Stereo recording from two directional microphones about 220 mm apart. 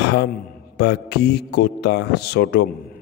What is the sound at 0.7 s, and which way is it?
A man's voice, 50° left (ahead or behind).